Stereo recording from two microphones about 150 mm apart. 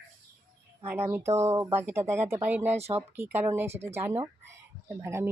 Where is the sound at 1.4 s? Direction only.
20° right (ahead or behind).